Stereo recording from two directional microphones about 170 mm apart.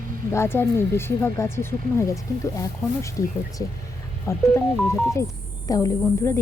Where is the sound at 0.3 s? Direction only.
15° left (ahead or behind).